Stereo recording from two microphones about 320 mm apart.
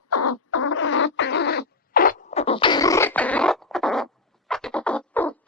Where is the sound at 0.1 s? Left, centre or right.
Left.